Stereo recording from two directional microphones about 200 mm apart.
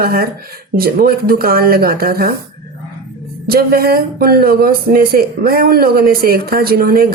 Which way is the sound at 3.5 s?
50° right (ahead or behind).